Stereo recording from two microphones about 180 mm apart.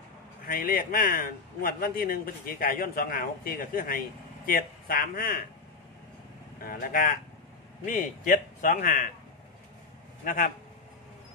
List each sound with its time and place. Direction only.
0.5 s a man's voice: 55° left (ahead or behind)
6.6 s a man's voice: 55° left (ahead or behind)
10.2 s a man's voice: 50° left (ahead or behind)